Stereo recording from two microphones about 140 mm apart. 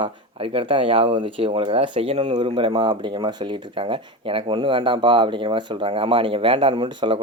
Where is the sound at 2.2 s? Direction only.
35° right (ahead or behind).